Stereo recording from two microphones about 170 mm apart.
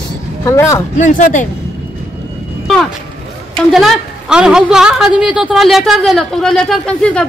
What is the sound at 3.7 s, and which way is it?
A woman's voice, centre (ahead or behind).